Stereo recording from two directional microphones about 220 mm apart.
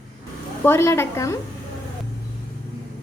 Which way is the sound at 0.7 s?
10° left (ahead or behind).